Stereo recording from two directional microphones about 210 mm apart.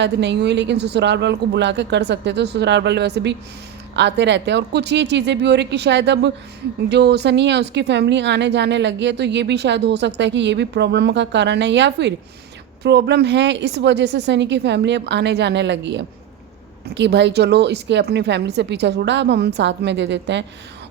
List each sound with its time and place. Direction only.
0.0 s a woman's voice: 55° right (ahead or behind)